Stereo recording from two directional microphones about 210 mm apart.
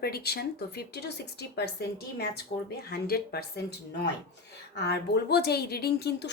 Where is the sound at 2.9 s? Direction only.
50° left (ahead or behind).